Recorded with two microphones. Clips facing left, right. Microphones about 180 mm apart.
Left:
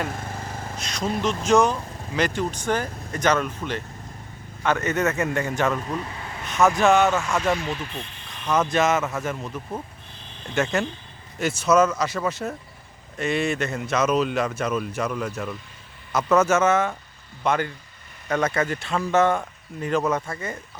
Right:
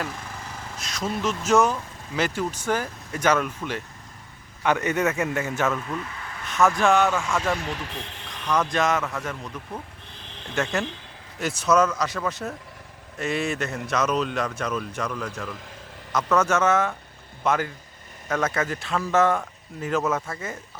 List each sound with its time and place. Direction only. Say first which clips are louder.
0.1 s vehicle: left 4 dB; 50° left (ahead or behind)
0.8 s speech: left 2 dB; centre (ahead or behind)
5.8 s a sound: left 2 dB; 35° left (ahead or behind)
6.7 s speech: left 2 dB; centre (ahead or behind)
7.8 s speech: left 1 dB; 90° right
8.5 s speech: left 2 dB; 5° left (ahead or behind)
10.5 s speech: left 3 dB; centre (ahead or behind)